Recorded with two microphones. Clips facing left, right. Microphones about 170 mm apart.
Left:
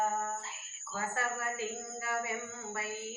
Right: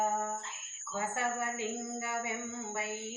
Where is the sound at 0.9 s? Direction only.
20° right (ahead or behind).